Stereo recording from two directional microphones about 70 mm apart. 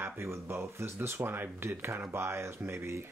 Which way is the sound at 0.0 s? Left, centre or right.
Right.